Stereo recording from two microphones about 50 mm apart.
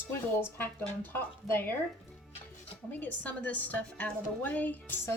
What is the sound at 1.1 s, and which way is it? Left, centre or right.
Speech, left.